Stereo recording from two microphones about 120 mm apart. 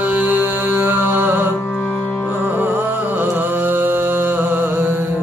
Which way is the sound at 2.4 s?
15° right (ahead or behind).